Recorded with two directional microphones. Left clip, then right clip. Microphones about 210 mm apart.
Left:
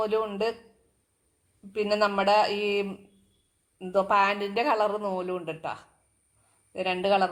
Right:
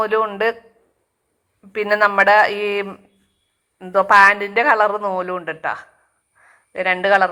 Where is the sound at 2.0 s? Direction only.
35° right (ahead or behind).